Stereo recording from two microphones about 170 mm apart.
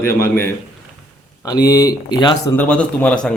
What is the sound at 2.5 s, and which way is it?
Speech, 10° left (ahead or behind).